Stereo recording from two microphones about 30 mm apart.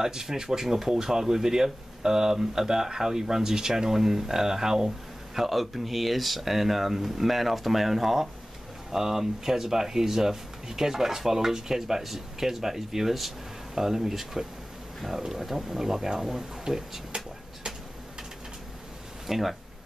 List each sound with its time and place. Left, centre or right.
0.0 s speech: centre
19.2 s speech: centre